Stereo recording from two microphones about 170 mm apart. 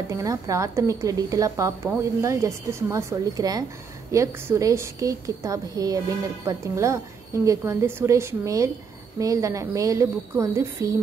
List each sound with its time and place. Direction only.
0.1 s a woman's voice: 20° right (ahead or behind)